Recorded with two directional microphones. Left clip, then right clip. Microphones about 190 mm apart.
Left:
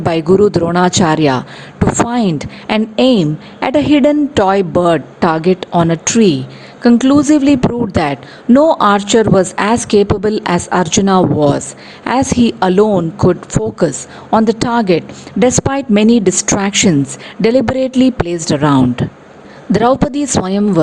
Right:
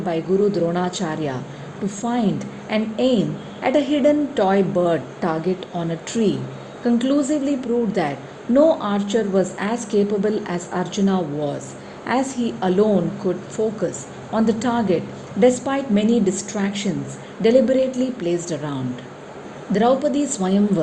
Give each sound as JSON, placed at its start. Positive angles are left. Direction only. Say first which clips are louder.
{"t": 0.1, "sound": "a woman's voice", "louder": "left 9 dB", "side_deg": 35}
{"t": 14.3, "sound": "a woman's voice", "louder": "left 9 dB", "side_deg": 35}